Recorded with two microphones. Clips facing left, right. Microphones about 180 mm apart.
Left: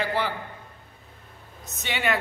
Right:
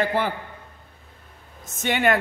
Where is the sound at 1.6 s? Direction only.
50° right (ahead or behind).